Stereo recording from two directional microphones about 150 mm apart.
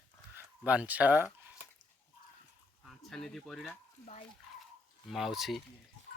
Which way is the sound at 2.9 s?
Centre (ahead or behind).